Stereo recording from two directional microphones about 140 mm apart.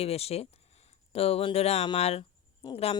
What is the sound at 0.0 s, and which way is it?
A woman's voice, 45° left (ahead or behind).